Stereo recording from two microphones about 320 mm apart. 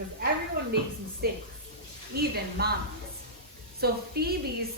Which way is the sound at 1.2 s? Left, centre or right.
Right.